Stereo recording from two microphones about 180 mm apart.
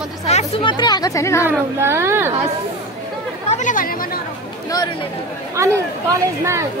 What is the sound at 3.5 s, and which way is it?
Speech, 45° left (ahead or behind).